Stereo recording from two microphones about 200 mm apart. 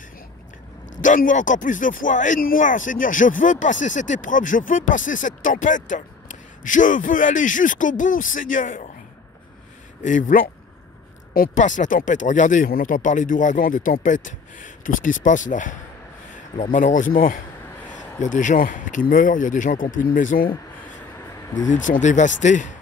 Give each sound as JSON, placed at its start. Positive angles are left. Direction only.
{"t": 1.0, "sound": "speech", "side_deg": 40}
{"t": 10.0, "sound": "speech", "side_deg": 40}
{"t": 16.7, "sound": "speech", "side_deg": 40}
{"t": 21.6, "sound": "speech", "side_deg": 40}